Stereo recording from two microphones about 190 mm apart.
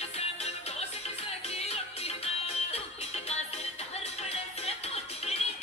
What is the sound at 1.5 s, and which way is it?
Music, 35° left (ahead or behind).